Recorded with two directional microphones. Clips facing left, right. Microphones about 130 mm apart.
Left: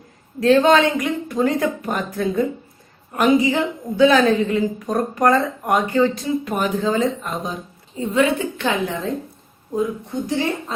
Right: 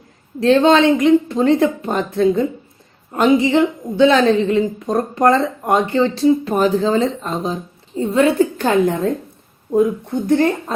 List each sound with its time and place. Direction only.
0.3 s a woman's voice: 25° right (ahead or behind); by 9.0 s 45° right (ahead or behind)
9.7 s speech: 55° right (ahead or behind)